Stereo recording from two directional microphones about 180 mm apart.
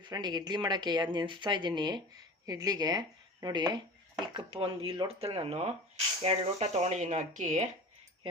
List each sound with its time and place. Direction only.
0.0 s speech: 25° right (ahead or behind); by 7.7 s 40° right (ahead or behind)